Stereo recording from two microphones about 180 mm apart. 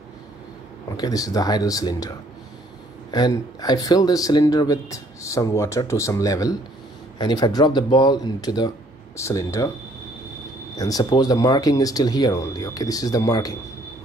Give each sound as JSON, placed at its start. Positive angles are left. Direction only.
{"t": 0.9, "sound": "speech", "side_deg": 20}
{"t": 10.8, "sound": "speech", "side_deg": 20}